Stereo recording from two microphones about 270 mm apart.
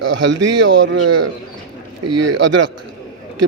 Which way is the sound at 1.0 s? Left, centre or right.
Right.